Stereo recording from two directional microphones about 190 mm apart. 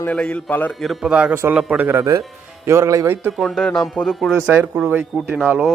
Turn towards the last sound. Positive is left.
turn(degrees=-5)  # may be behind; listen again after turning